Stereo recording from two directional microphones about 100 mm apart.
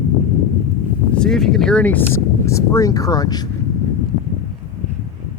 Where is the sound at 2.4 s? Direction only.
30° left (ahead or behind).